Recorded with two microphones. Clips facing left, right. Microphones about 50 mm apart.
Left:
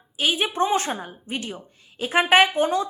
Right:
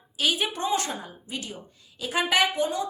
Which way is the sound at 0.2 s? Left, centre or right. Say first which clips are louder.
Left 4 dB; left.